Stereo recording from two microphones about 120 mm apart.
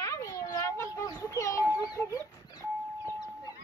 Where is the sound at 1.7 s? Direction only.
25° left (ahead or behind).